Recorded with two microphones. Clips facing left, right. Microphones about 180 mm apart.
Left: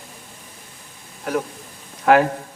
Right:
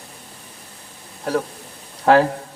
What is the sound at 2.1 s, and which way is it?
Speech, 30° right (ahead or behind).